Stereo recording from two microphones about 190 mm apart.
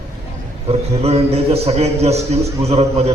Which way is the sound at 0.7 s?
35° right (ahead or behind).